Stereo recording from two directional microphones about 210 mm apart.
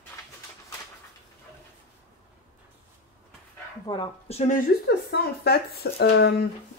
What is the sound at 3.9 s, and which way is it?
Speech, 30° left (ahead or behind).